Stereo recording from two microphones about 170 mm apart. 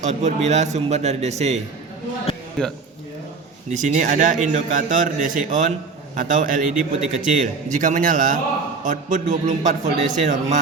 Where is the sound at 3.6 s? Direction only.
45° right (ahead or behind).